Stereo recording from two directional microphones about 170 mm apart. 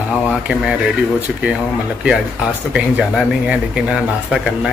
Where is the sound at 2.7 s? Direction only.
5° right (ahead or behind).